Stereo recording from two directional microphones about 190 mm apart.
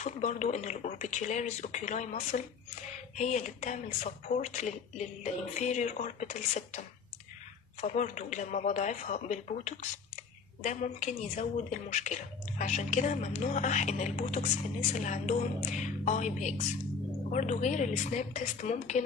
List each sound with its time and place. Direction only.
0.0 s speech: 40° left (ahead or behind)
7.8 s speech: 40° left (ahead or behind)